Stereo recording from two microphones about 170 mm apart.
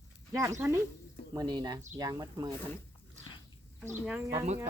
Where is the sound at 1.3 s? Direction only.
25° right (ahead or behind).